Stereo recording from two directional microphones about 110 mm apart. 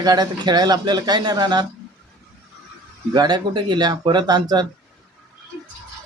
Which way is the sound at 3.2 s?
40° right (ahead or behind).